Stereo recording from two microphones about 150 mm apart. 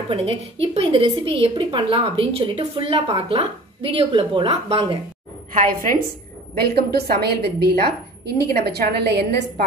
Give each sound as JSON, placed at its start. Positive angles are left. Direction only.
{"t": 0.1, "sound": "a woman's voice", "side_deg": -40}
{"t": 5.7, "sound": "a woman's voice", "side_deg": -75}
{"t": 6.6, "sound": "a woman's voice", "side_deg": -90}